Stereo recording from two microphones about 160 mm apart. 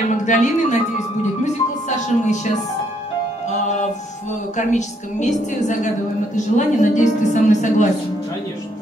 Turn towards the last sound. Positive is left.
turn(degrees=50)  # may be behind; listen again after turning